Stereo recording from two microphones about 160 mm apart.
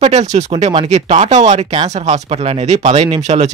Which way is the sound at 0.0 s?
45° right (ahead or behind).